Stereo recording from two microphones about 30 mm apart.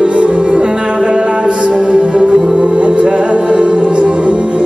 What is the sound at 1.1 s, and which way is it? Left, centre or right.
Mantra, right.